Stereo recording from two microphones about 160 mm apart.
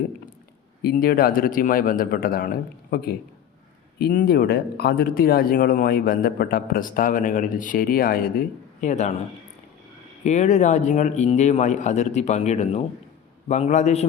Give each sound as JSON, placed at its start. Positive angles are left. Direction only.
{"t": 0.8, "sound": "speech", "side_deg": 70}
{"t": 2.9, "sound": "a man's voice", "side_deg": 75}
{"t": 8.8, "sound": "a man's voice", "side_deg": 45}
{"t": 10.2, "sound": "a man's voice", "side_deg": 50}